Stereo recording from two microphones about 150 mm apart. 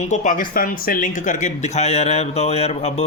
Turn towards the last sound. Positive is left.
turn(degrees=45)  # may be behind; listen again after turning